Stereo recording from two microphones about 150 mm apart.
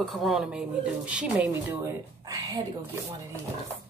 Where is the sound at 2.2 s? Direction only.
25° right (ahead or behind).